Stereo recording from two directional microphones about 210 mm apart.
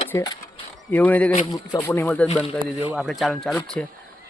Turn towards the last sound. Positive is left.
turn(degrees=5)  # may be behind; listen again after turning